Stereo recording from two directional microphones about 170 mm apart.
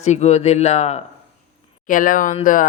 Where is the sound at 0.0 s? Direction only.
40° left (ahead or behind).